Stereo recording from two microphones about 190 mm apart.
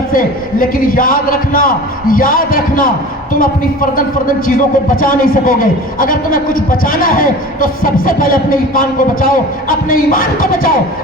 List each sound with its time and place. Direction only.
0.1 s a man's voice: 50° left (ahead or behind)